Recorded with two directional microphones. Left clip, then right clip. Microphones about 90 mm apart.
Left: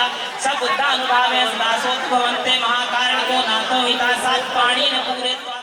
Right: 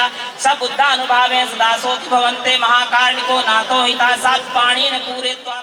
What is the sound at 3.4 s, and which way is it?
A man's voice, 25° right (ahead or behind).